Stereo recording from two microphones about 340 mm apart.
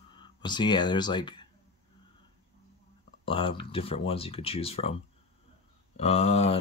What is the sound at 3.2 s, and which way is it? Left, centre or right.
Speech, centre.